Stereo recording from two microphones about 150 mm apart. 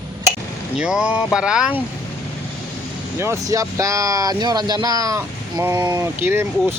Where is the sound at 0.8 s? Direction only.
5° right (ahead or behind).